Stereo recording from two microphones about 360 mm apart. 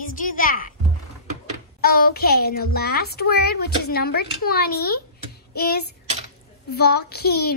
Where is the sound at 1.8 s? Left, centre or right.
Left.